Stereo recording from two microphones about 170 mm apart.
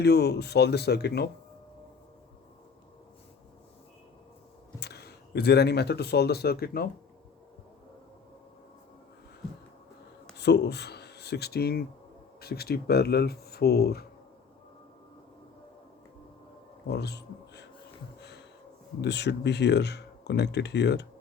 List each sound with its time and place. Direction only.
0.0 s speech: 75° left (ahead or behind)
4.8 s speech: 75° left (ahead or behind)
10.3 s speech: 80° left
16.9 s music: 75° left (ahead or behind)
19.0 s speech: 85° left